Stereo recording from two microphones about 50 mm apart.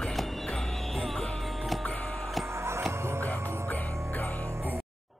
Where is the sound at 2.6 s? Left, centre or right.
Right.